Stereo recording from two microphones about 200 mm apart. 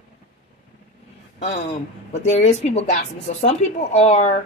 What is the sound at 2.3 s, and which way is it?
A woman's voice, 30° left (ahead or behind).